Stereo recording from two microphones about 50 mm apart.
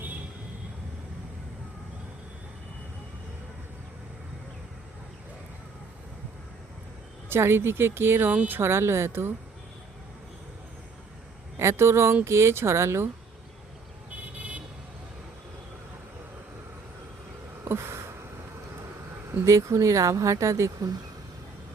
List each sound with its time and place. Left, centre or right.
7.3 s speech: right
11.5 s speech: right
17.7 s a sound: right
19.5 s speech: right